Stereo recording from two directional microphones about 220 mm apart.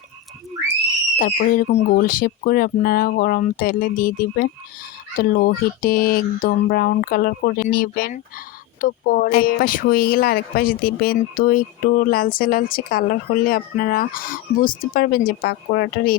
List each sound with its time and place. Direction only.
1.2 s speech: 40° left (ahead or behind)